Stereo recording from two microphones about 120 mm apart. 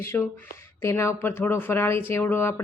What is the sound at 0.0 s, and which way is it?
Speech, 20° left (ahead or behind).